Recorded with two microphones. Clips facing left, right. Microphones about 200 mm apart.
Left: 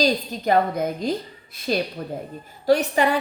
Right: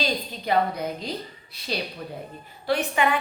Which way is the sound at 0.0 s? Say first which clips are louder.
Left 7 dB; 45° left (ahead or behind).